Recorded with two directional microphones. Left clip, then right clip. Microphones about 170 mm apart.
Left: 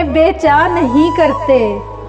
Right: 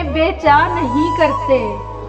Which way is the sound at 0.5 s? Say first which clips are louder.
Left 3 dB; 20° left (ahead or behind).